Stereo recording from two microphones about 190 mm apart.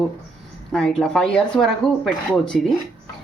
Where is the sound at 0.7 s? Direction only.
5° left (ahead or behind).